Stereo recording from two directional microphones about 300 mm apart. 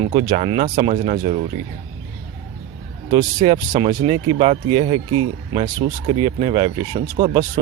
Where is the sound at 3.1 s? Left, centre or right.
Centre.